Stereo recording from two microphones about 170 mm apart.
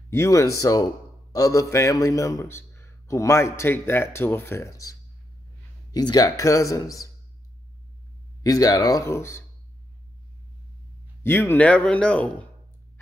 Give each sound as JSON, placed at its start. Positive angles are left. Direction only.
{"t": 0.1, "sound": "a man's voice", "side_deg": 15}
{"t": 8.4, "sound": "speech", "side_deg": 20}
{"t": 11.2, "sound": "a man's voice", "side_deg": 10}